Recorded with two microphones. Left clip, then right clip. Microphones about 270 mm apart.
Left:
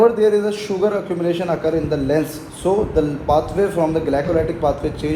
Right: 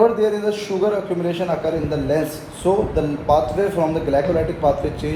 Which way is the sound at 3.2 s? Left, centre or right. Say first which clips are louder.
Right 3 dB; left.